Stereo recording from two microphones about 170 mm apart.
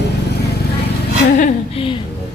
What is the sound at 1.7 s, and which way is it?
Speech, 30° left (ahead or behind).